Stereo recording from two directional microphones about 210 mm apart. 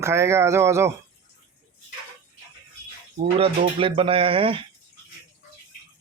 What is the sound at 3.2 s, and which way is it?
Speech, 25° right (ahead or behind).